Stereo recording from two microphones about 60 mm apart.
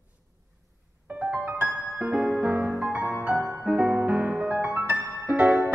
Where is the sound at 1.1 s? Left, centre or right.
Right.